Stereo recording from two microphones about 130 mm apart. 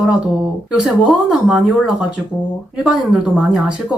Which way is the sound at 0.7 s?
5° right (ahead or behind).